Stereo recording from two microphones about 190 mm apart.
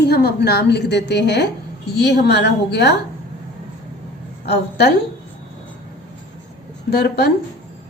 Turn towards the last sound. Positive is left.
turn(degrees=60)  # may be behind; listen again after turning